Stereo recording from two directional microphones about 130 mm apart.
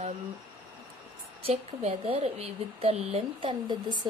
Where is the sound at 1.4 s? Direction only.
55° right (ahead or behind).